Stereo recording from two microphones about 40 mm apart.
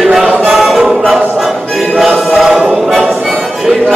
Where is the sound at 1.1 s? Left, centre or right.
Centre.